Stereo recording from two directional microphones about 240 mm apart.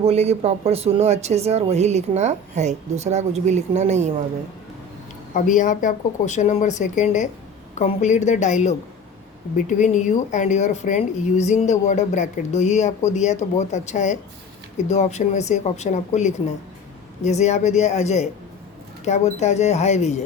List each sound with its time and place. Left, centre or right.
0.0 s speech: right
5.3 s speech: left